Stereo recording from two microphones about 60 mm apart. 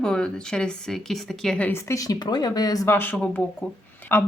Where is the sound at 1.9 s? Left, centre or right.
Left.